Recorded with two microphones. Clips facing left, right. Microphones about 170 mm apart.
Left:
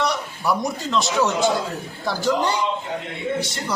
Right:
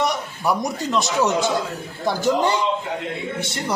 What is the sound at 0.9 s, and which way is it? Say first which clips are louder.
Speech: right 1 dB; 20° right (ahead or behind).